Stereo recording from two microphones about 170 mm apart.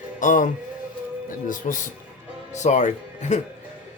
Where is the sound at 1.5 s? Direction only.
50° left (ahead or behind).